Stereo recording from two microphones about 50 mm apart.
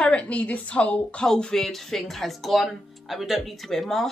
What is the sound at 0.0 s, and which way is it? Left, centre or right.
A woman's voice, left.